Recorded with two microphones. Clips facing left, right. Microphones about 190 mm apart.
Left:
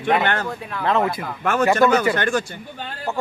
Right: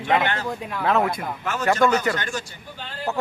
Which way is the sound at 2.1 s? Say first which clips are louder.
Left 8 dB; 60° left (ahead or behind).